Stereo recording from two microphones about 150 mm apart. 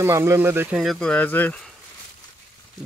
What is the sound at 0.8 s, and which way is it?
Speech, 5° left (ahead or behind).